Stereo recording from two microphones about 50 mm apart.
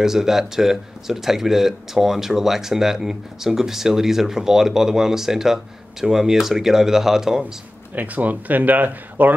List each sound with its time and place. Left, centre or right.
0.0 s speech: centre
7.9 s speech: right